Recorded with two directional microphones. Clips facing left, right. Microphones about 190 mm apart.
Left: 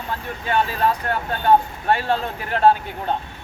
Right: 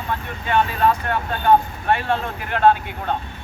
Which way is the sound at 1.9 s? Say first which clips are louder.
Even; 35° left (ahead or behind).